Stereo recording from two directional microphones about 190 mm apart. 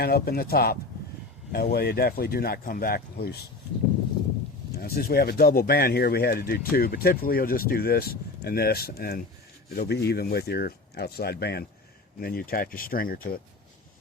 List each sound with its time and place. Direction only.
0.0 s speech: 55° left (ahead or behind)
4.7 s speech: 55° left (ahead or behind)